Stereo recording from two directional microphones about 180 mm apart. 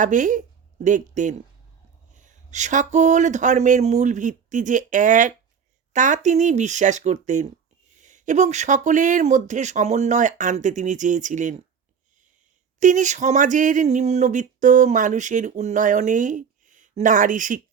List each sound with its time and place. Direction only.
0.0 s speech: 45° right (ahead or behind)
12.8 s speech: 45° right (ahead or behind)